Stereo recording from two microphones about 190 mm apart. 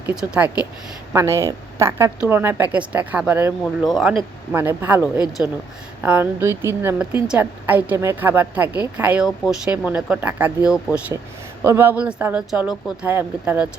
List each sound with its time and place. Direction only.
0.0 s a woman's voice: 5° right (ahead or behind)
3.6 s speech: centre (ahead or behind)
4.2 s a woman's voice: 10° right (ahead or behind)